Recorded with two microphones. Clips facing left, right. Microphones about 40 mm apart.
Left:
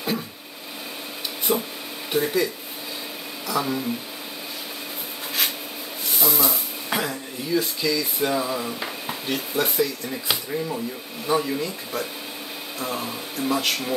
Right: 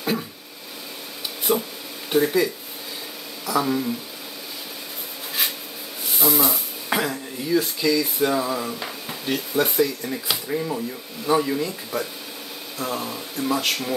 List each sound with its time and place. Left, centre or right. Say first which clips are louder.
1.5 s speech: right 2 dB; centre
6.1 s speech: right 2 dB; centre
8.7 s a sound: left 2 dB; centre
9.3 s speech: right 3 dB; centre